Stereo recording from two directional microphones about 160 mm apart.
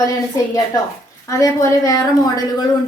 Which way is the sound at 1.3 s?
20° left (ahead or behind).